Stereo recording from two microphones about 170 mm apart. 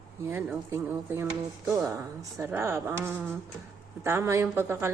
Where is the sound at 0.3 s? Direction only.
10° right (ahead or behind).